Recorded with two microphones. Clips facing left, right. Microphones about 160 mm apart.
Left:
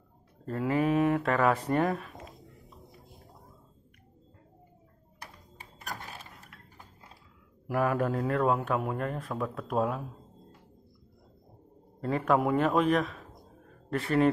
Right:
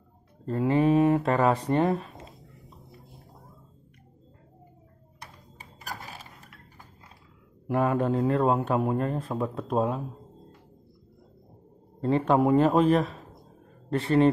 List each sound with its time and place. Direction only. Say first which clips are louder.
0.5 s speech: right 5 dB; 25° right (ahead or behind)
5.2 s a sound: right 1 dB; centre (ahead or behind)
7.6 s speech: right 3 dB; 25° right (ahead or behind)
12.0 s a man's voice: right 4 dB; 25° right (ahead or behind)